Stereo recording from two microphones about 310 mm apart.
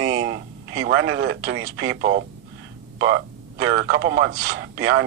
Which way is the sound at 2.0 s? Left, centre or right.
Right.